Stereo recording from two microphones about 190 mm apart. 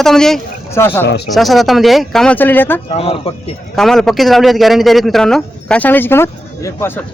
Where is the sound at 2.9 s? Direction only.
30° left (ahead or behind).